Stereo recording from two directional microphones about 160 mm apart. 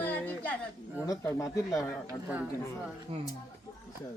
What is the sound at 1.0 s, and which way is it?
Speech, 20° left (ahead or behind).